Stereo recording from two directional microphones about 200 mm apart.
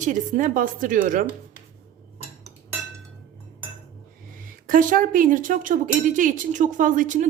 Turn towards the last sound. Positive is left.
turn(degrees=-40)  # may be behind; listen again after turning